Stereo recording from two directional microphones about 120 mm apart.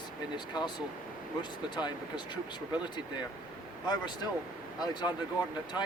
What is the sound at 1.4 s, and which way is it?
Speech, 40° left (ahead or behind).